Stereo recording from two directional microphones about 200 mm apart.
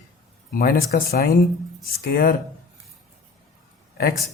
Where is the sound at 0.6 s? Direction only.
50° left (ahead or behind).